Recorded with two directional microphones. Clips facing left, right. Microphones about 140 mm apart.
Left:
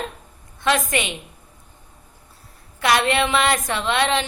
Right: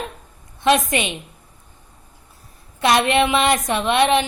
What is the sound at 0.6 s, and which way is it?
Speech, 20° right (ahead or behind).